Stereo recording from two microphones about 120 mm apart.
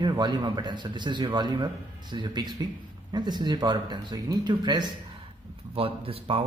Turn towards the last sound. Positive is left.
turn(degrees=-50)  # may be behind; listen again after turning